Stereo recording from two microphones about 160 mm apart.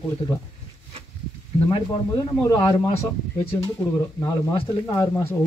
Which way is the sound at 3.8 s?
20° left (ahead or behind).